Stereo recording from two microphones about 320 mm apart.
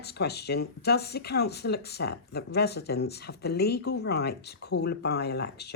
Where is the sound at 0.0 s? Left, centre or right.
Left.